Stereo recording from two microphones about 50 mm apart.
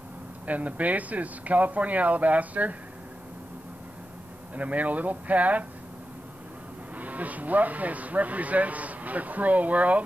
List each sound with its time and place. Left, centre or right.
0.5 s speech: right
4.6 s speech: right
7.0 s speech: right